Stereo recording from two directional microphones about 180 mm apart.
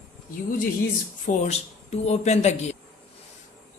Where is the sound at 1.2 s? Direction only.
40° left (ahead or behind).